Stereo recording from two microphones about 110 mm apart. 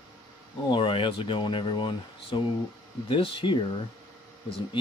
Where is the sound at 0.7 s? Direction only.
50° left (ahead or behind).